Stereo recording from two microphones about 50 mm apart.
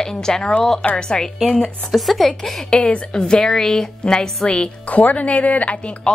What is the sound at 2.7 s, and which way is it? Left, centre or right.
A woman's voice, left.